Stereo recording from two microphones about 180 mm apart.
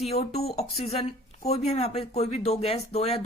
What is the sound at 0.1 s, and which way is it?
Speech, 35° left (ahead or behind).